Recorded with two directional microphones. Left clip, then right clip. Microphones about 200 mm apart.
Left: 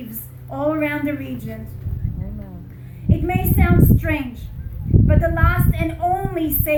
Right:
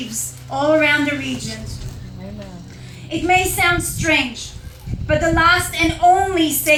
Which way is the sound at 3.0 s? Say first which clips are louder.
Right 7 dB; 45° left (ahead or behind).